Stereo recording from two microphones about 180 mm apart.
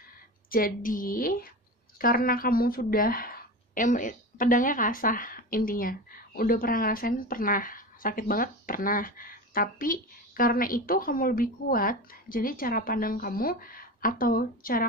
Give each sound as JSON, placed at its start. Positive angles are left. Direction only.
{"t": 0.5, "sound": "a woman's voice", "side_deg": 50}